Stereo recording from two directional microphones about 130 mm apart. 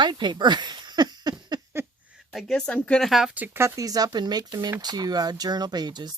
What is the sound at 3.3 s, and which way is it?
Speech, 15° right (ahead or behind).